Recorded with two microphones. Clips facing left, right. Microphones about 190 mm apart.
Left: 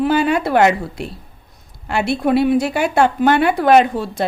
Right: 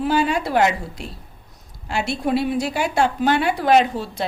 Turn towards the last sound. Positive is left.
turn(degrees=55)  # may be behind; listen again after turning